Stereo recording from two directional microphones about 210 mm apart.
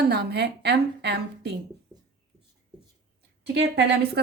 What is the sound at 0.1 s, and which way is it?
A woman's voice, 50° right (ahead or behind).